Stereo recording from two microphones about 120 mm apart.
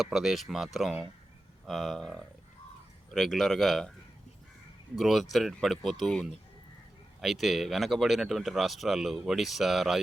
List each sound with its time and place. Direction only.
0.0 s speech: centre (ahead or behind)
4.9 s speech: centre (ahead or behind)